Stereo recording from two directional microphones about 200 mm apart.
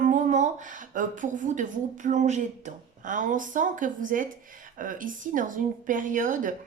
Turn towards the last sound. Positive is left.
turn(degrees=-40)  # may be behind; listen again after turning